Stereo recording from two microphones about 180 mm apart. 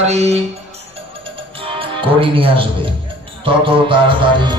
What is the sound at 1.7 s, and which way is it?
Music, 30° right (ahead or behind).